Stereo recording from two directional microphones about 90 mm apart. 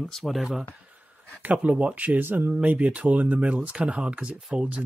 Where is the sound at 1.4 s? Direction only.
15° right (ahead or behind).